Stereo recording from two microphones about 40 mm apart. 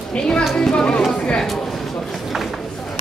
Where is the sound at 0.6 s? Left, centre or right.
Left.